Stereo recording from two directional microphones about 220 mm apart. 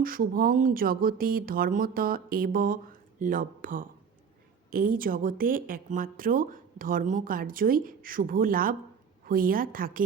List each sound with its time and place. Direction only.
0.0 s a woman's voice: 40° right (ahead or behind)